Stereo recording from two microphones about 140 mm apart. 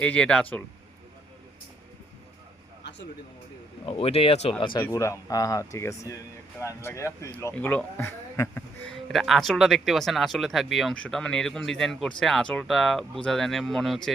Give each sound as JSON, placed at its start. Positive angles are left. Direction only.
{"t": 0.0, "sound": "speech", "side_deg": 10}
{"t": 3.8, "sound": "speech", "side_deg": 45}
{"t": 4.8, "sound": "speech", "side_deg": 20}
{"t": 8.9, "sound": "speech", "side_deg": 0}